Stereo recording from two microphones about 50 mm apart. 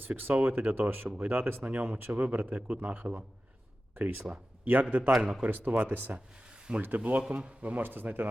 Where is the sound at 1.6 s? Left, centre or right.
Right.